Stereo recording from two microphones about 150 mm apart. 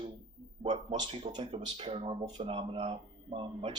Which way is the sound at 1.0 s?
30° right (ahead or behind).